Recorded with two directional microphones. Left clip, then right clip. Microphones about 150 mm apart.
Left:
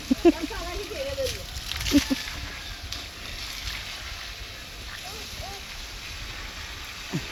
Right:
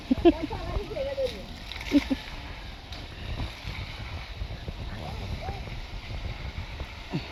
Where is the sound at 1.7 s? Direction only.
45° left (ahead or behind).